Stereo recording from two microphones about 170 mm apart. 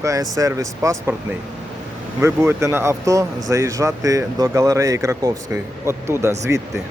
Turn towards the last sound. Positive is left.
turn(degrees=-15)  # may be behind; listen again after turning